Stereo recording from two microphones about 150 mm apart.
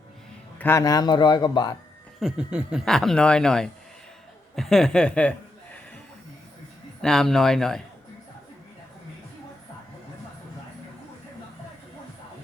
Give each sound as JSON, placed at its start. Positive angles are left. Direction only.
{"t": 0.6, "sound": "a man's voice", "side_deg": 20}
{"t": 2.2, "sound": "speech", "side_deg": -5}
{"t": 7.0, "sound": "speech", "side_deg": 5}